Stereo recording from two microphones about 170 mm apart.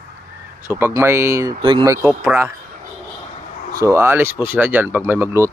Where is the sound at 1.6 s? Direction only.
30° right (ahead or behind).